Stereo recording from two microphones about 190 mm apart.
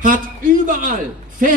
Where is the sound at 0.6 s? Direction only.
45° right (ahead or behind).